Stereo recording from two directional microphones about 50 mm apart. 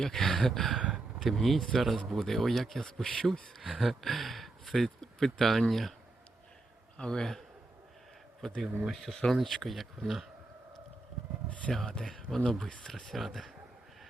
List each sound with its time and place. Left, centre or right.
0.0 s speech: centre
0.8 s gasp: right
1.2 s speech: centre
3.6 s speech: centre
7.0 s speech: centre
8.4 s speech: centre
11.7 s speech: centre